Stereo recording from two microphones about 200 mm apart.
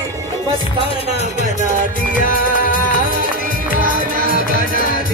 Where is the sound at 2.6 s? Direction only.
45° left (ahead or behind).